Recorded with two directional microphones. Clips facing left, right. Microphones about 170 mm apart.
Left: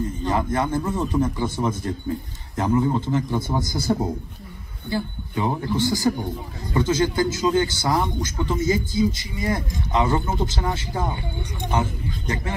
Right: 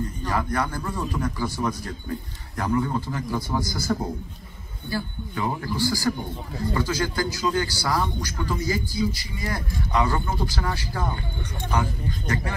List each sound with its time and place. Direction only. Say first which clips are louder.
0.2 s a man's voice: left 3 dB; 20° left (ahead or behind)